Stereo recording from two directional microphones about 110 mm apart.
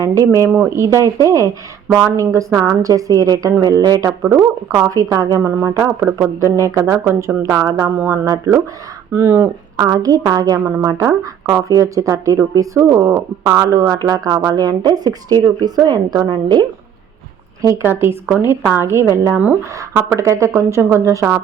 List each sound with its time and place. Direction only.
0.0 s a woman's voice: 30° right (ahead or behind)
4.0 s speech: 25° right (ahead or behind)
5.4 s speech: 20° right (ahead or behind)
6.2 s speech: 25° right (ahead or behind)
9.7 s a woman's voice: 35° right (ahead or behind)
17.6 s speech: 25° right (ahead or behind)
20.1 s speech: 30° right (ahead or behind)